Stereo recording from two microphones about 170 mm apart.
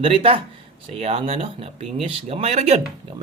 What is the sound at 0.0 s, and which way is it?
Speech, 35° right (ahead or behind).